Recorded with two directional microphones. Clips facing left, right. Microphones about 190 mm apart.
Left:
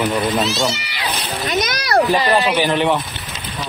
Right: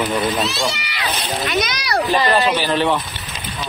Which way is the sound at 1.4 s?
50° left (ahead or behind).